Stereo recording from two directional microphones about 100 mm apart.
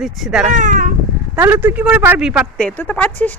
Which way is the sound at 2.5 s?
10° left (ahead or behind).